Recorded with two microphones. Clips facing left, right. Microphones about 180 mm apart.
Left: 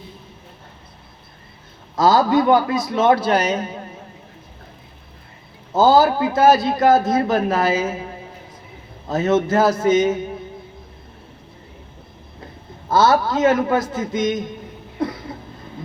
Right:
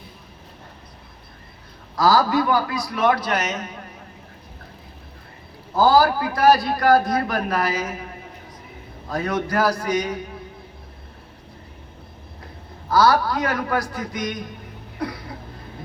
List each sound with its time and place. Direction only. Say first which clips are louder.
2.0 s a man's voice: left 3 dB; 20° left (ahead or behind)
5.7 s a man's voice: left 2 dB; 25° left (ahead or behind)
12.9 s a man's voice: left 2 dB; 25° left (ahead or behind)
15.0 s a sound: left 5 dB; 25° left (ahead or behind)